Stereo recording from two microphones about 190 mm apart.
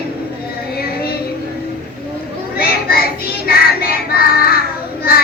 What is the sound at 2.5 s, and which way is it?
Children playing, 55° left (ahead or behind).